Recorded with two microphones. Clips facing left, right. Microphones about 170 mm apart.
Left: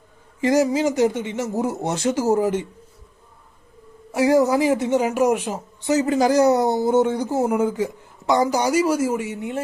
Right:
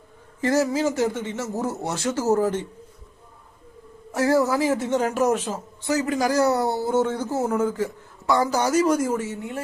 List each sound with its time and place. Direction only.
0.4 s a woman's voice: 15° left (ahead or behind)
4.1 s a woman's voice: 15° left (ahead or behind)